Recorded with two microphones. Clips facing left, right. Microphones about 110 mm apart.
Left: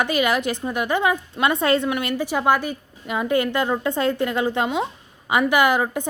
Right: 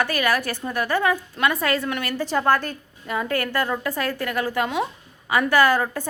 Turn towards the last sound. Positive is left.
turn(degrees=15)  # may be behind; listen again after turning